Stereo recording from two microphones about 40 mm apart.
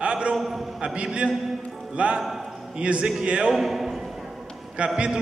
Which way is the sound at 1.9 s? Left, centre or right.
Right.